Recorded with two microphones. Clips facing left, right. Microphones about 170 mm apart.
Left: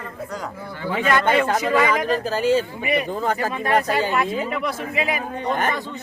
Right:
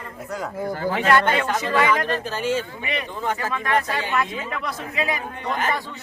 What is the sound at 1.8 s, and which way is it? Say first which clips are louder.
Speech: left 1 dB; 35° left (ahead or behind).